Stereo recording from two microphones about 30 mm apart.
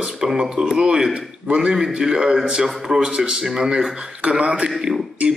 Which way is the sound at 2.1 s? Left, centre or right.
Right.